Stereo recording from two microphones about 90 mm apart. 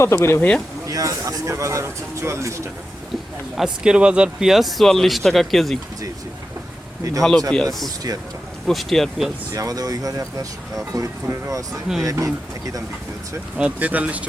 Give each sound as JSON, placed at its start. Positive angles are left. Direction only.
{"t": 0.0, "sound": "speech", "side_deg": 30}
{"t": 0.9, "sound": "speech", "side_deg": -40}
{"t": 3.6, "sound": "speech", "side_deg": -10}
{"t": 7.2, "sound": "speech", "side_deg": 5}
{"t": 9.5, "sound": "speech", "side_deg": -40}
{"t": 13.6, "sound": "speech", "side_deg": -15}